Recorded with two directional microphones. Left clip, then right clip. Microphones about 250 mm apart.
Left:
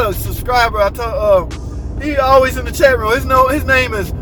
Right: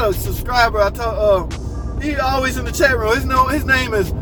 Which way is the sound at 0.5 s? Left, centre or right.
Centre.